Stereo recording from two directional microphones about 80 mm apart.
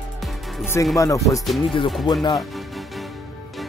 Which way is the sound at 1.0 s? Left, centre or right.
Left.